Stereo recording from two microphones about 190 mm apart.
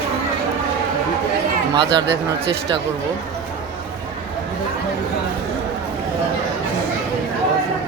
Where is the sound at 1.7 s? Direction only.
60° right (ahead or behind).